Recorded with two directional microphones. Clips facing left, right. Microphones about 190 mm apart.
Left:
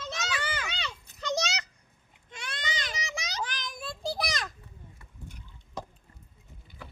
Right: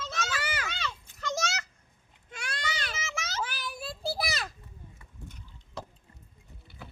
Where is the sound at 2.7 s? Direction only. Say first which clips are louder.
Left 2 dB; 15° left (ahead or behind).